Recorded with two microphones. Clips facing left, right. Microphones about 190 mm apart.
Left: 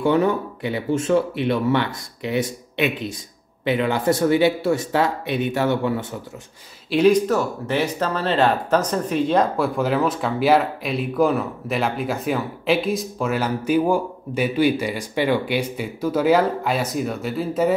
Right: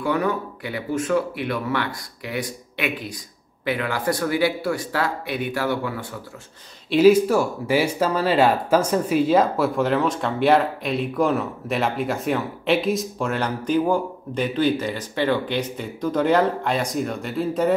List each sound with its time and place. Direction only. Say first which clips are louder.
0.0 s speech: left 4 dB; 25° left (ahead or behind)
6.9 s speech: right 2 dB; 5° right (ahead or behind)